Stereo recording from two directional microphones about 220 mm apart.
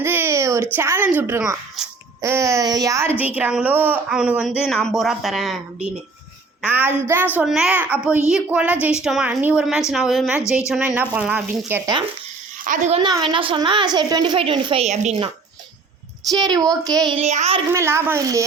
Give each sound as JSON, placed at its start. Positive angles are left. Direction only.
{"t": 0.0, "sound": "speech", "side_deg": -10}
{"t": 2.2, "sound": "a woman's voice", "side_deg": -15}
{"t": 12.6, "sound": "speech", "side_deg": -35}
{"t": 13.0, "sound": "a woman's voice", "side_deg": -20}
{"t": 16.3, "sound": "speech", "side_deg": -20}
{"t": 17.1, "sound": "a woman's voice", "side_deg": -30}
{"t": 17.7, "sound": "speech", "side_deg": -10}